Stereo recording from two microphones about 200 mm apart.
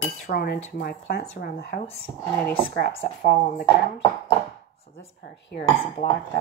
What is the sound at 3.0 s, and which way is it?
Speech, 45° left (ahead or behind).